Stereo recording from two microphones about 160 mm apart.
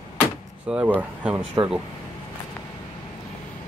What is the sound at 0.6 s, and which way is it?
Speech, 5° right (ahead or behind).